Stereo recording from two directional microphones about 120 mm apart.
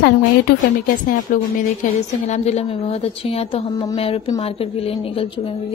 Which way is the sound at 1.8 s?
70° left (ahead or behind).